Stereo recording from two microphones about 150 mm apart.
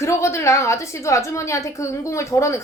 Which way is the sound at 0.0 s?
20° left (ahead or behind).